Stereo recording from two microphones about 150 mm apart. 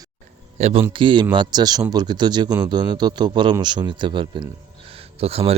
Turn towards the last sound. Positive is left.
turn(degrees=-40)  # may be behind; listen again after turning